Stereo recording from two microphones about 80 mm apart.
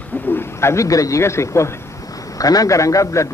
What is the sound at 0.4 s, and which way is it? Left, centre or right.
A man's voice, left.